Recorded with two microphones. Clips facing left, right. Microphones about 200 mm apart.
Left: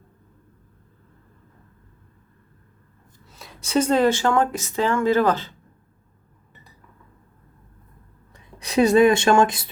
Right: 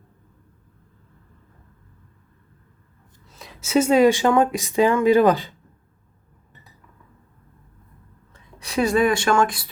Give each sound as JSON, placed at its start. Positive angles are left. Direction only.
{"t": 3.2, "sound": "speech", "side_deg": 0}
{"t": 8.3, "sound": "speech", "side_deg": 20}